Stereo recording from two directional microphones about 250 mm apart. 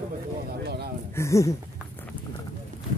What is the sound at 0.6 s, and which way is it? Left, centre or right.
Speech, right.